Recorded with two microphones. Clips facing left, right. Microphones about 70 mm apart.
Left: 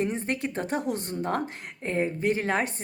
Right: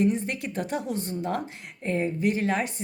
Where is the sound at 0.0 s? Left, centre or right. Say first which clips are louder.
Right 3 dB; left.